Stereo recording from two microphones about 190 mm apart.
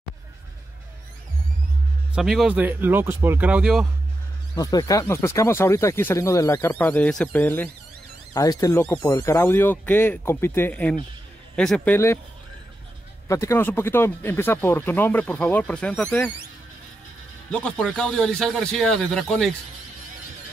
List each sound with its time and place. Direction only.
2.1 s speech: 5° right (ahead or behind)
4.6 s speech: 20° left (ahead or behind)
13.3 s speech: 15° left (ahead or behind)
17.5 s speech: 5° left (ahead or behind)